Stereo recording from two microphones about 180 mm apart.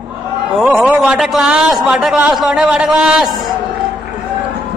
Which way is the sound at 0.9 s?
Centre (ahead or behind).